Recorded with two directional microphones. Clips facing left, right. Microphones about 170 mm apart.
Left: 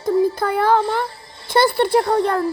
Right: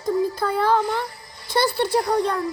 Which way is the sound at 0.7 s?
30° left (ahead or behind).